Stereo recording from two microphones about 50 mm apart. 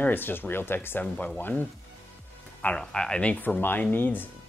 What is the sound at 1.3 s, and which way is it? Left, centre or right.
Speech, left.